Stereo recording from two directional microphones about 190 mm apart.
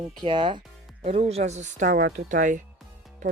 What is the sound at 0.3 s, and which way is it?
Speech, 25° right (ahead or behind).